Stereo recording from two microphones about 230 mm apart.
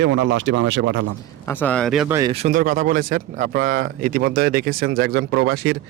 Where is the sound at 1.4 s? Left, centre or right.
Centre.